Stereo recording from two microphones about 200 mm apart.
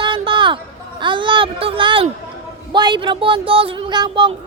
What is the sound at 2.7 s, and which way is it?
Speech, 20° right (ahead or behind).